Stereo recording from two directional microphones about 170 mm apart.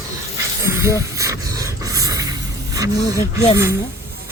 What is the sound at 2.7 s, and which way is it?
Speech, 20° right (ahead or behind).